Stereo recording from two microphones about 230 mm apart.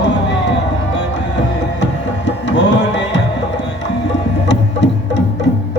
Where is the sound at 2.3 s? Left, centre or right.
Left.